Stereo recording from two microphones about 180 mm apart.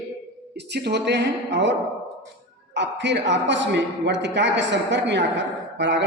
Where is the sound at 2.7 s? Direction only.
80° right.